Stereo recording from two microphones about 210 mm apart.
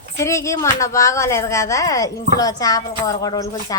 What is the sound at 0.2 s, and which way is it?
A woman's voice, 15° left (ahead or behind).